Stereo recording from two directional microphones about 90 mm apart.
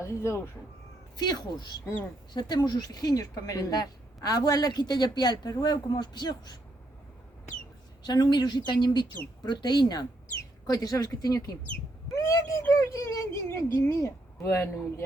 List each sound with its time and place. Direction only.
0.0 s speech: 30° left (ahead or behind)
1.1 s a woman's voice: 50° left (ahead or behind)
8.0 s a woman's voice: 50° left (ahead or behind)
12.1 s a sound: 35° left (ahead or behind)
12.7 s speech: 35° left (ahead or behind)